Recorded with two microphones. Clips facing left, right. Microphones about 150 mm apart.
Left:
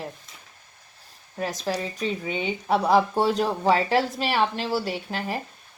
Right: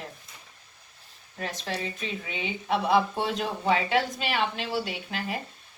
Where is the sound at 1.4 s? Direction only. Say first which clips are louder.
Left 5 dB; 40° left (ahead or behind).